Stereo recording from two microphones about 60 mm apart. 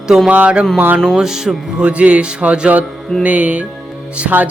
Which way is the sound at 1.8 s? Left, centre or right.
Right.